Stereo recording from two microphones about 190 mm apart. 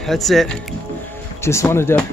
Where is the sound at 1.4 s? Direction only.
15° left (ahead or behind).